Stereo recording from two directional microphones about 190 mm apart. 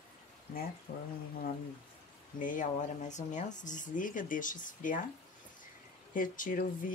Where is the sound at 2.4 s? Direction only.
45° left (ahead or behind).